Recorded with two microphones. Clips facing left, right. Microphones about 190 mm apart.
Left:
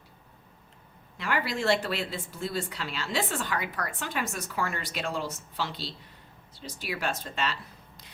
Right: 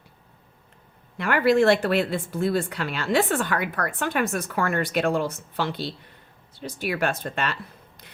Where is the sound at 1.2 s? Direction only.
55° right (ahead or behind).